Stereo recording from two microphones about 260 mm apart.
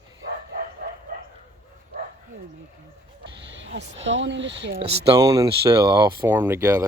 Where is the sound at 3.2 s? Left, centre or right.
Right.